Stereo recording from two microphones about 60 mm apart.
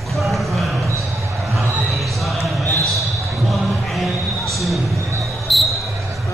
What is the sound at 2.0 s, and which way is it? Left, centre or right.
Basketball bounce, centre.